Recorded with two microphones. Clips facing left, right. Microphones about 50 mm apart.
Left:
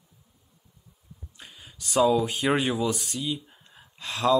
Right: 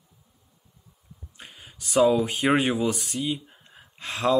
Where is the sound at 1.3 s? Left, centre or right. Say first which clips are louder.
Right 2 dB; right.